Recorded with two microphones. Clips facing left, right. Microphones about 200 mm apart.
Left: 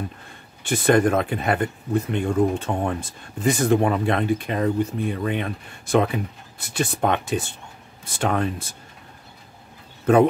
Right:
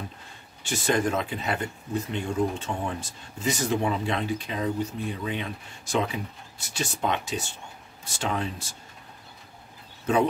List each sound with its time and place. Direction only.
0.7 s speech: 55° left (ahead or behind)
10.1 s speech: 55° left (ahead or behind)